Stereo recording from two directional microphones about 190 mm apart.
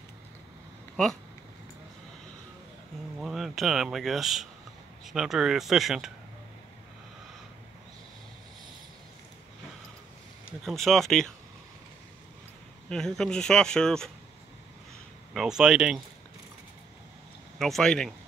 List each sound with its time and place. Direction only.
3.2 s speech: centre (ahead or behind)
10.6 s speech: centre (ahead or behind)
12.9 s speech: 5° left (ahead or behind)
15.3 s speech: 5° right (ahead or behind)
17.6 s speech: centre (ahead or behind)